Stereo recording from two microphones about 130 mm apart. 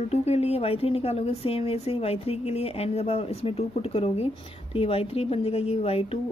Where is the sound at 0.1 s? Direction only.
55° left (ahead or behind).